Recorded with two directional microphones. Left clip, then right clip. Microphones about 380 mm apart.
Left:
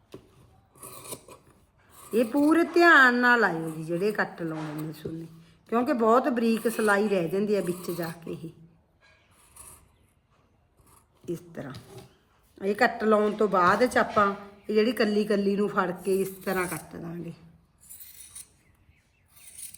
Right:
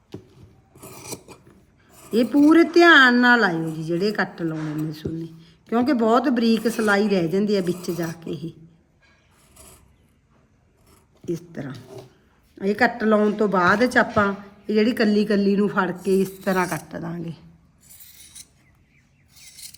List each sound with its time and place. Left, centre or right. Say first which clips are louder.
2.0 s speech: right 6 dB; centre
11.3 s speech: right 6 dB; centre